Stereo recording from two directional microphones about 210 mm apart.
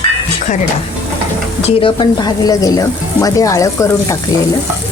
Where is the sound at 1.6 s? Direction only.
25° left (ahead or behind).